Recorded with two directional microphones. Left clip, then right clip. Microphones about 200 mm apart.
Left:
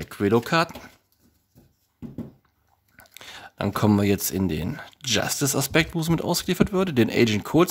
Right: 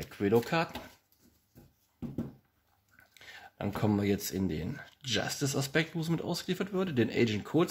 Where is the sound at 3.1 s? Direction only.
45° left (ahead or behind).